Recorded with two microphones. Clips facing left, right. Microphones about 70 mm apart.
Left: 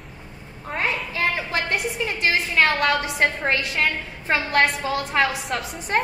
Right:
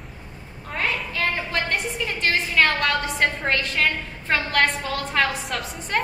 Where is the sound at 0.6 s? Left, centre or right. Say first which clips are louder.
Left 1 dB; left.